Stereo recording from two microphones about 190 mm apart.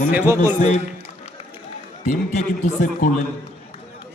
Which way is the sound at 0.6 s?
40° left (ahead or behind).